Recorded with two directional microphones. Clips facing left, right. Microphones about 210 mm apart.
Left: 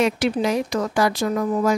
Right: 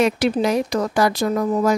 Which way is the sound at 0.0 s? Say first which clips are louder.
Right 2 dB; 40° right (ahead or behind).